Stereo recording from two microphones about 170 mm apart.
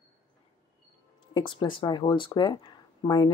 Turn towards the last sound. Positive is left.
turn(degrees=25)  # may be behind; listen again after turning